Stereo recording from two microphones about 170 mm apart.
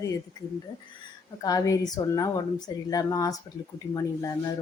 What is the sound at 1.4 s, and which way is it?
Speech, 20° left (ahead or behind).